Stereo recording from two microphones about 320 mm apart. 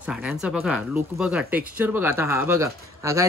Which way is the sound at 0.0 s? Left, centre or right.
Centre.